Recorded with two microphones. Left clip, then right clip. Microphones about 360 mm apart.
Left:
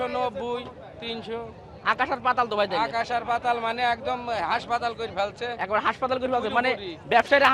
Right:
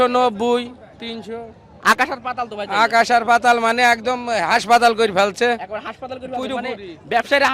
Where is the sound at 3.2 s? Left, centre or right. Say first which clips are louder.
Right 11 dB; right.